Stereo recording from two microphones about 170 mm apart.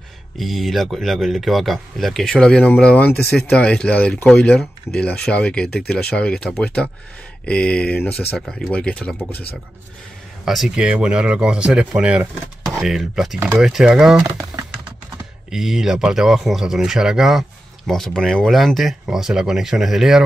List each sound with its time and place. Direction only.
0.4 s speech: centre (ahead or behind)
10.4 s speech: centre (ahead or behind)
14.2 s typing: 15° right (ahead or behind)
15.5 s speech: centre (ahead or behind)